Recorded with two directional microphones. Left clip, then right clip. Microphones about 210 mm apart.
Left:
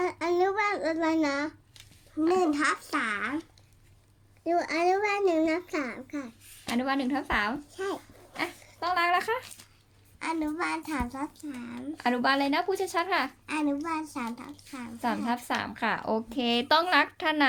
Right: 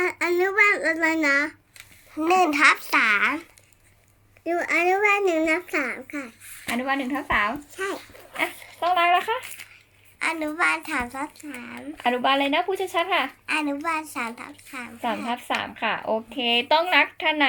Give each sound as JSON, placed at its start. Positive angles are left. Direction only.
{"t": 0.0, "sound": "a sound", "side_deg": 10}
{"t": 2.1, "sound": "a child's voice", "side_deg": -35}
{"t": 4.4, "sound": "a woman's voice", "side_deg": 10}
{"t": 8.4, "sound": "a woman's voice", "side_deg": -5}
{"t": 10.2, "sound": "a woman's voice", "side_deg": 5}